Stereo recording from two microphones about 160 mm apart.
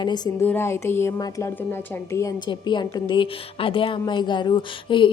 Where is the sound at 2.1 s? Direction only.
25° left (ahead or behind).